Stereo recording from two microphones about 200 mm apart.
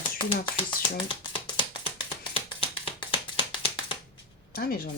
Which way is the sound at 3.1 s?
25° left (ahead or behind).